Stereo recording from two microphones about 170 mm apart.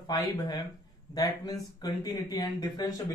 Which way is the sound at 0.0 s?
25° left (ahead or behind).